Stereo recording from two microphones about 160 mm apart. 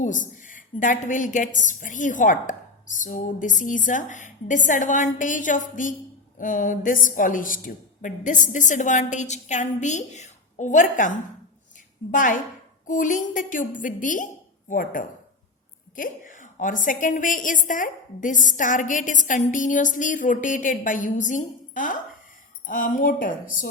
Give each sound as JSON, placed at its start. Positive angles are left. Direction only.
{"t": 0.0, "sound": "a woman's voice", "side_deg": 55}
{"t": 12.1, "sound": "a woman's voice", "side_deg": 55}